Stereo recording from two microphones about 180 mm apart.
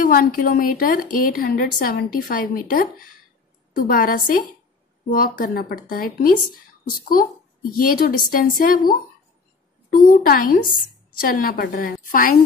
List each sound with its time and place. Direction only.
0.0 s a woman's voice: 50° left (ahead or behind)